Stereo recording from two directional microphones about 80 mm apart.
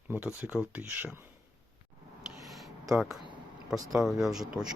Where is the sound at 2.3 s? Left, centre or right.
Centre.